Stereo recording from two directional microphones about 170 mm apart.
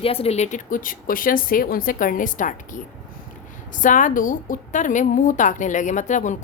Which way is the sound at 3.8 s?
50° left (ahead or behind).